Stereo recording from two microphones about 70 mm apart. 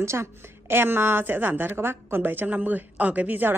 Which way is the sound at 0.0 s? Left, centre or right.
Right.